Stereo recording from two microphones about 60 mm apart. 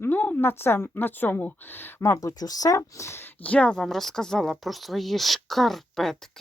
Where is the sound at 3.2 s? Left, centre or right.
Left.